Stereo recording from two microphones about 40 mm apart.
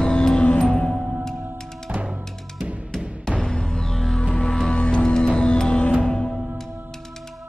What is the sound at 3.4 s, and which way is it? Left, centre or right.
Music, centre.